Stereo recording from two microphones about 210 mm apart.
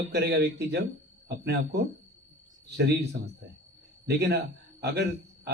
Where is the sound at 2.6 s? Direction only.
55° right (ahead or behind).